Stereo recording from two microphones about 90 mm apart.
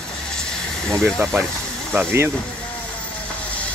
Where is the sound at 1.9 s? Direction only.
25° right (ahead or behind).